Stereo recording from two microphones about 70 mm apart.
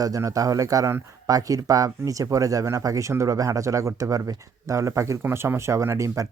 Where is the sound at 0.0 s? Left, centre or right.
Right.